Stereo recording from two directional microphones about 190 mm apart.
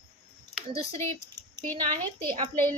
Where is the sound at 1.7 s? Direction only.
10° left (ahead or behind).